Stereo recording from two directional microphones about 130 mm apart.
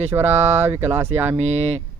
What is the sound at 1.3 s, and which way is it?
Speech, 55° right (ahead or behind).